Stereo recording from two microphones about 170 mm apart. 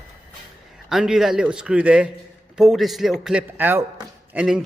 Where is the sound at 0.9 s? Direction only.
Centre (ahead or behind).